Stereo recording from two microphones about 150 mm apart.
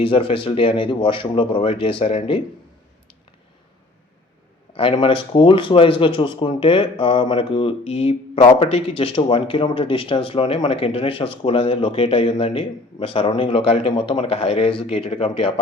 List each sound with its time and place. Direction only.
0.0 s speech: 40° left (ahead or behind)
4.7 s speech: 40° left (ahead or behind)